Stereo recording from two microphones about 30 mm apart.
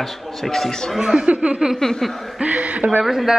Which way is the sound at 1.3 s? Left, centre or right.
Right.